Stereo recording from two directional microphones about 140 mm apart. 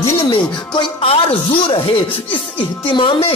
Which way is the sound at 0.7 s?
40° left (ahead or behind).